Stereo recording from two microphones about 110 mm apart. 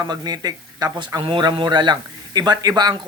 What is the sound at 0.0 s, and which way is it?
Speech, 35° right (ahead or behind).